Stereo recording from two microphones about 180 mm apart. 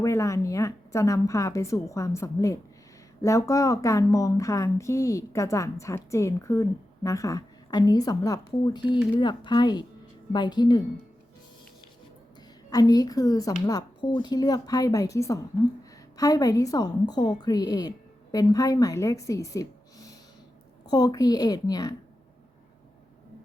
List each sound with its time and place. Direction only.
0.0 s a woman's voice: 15° left (ahead or behind)
12.7 s a woman's voice: 20° left (ahead or behind)